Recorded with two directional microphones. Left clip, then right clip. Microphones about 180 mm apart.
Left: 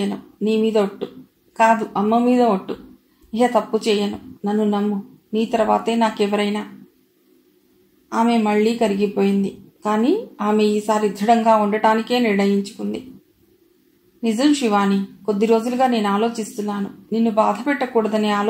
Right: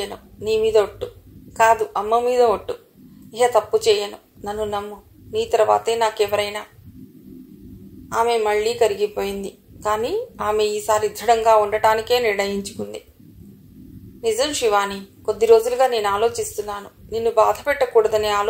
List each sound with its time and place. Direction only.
0.0 s a woman's voice: 35° right (ahead or behind)
8.1 s a woman's voice: 35° right (ahead or behind)
14.2 s a woman's voice: 35° right (ahead or behind)